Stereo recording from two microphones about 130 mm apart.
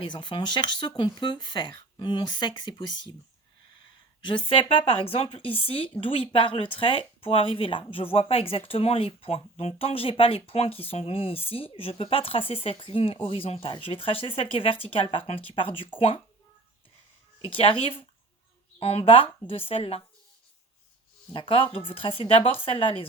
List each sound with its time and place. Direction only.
0.0 s speech: 35° left (ahead or behind)
4.2 s speech: 40° left (ahead or behind)
17.4 s speech: 45° left (ahead or behind)
21.3 s speech: 40° left (ahead or behind)